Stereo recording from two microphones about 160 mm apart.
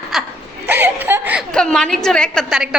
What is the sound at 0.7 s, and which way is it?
Whimper, 15° right (ahead or behind).